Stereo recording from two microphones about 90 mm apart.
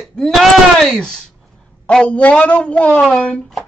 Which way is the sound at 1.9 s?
10° left (ahead or behind).